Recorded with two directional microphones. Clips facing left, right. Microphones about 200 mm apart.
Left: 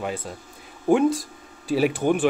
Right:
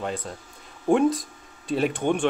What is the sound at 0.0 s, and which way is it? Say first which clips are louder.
Speech: left 1 dB; 5° left (ahead or behind).